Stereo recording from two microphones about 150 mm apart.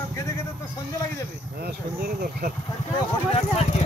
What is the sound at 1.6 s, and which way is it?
Speech, 85° right.